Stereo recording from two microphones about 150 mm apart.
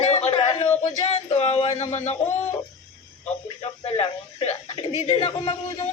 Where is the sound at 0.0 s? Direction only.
45° left (ahead or behind).